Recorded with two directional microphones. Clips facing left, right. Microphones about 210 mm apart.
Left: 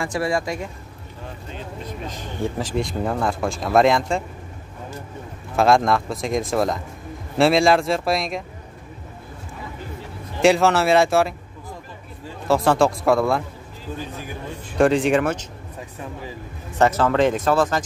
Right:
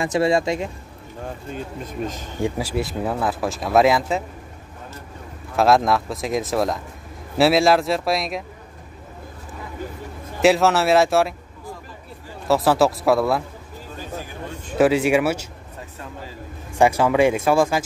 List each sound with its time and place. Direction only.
0.0 s speech: 20° right (ahead or behind)
2.4 s speech: 10° right (ahead or behind)
5.6 s speech: centre (ahead or behind)
10.4 s speech: centre (ahead or behind)
12.4 s speech: centre (ahead or behind)
14.8 s speech: 5° right (ahead or behind)
16.7 s speech: 10° right (ahead or behind)